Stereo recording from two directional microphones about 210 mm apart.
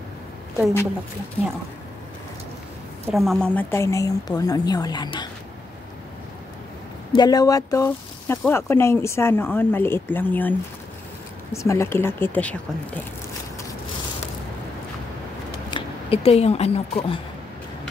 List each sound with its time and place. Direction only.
3.2 s speech: centre (ahead or behind); by 5.3 s 20° left (ahead or behind)
7.1 s speech: 20° left (ahead or behind)
11.5 s speech: 15° left (ahead or behind)
15.7 s speech: 30° left (ahead or behind)